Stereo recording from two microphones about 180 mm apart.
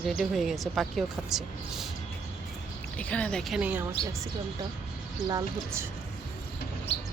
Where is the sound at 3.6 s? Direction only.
10° right (ahead or behind).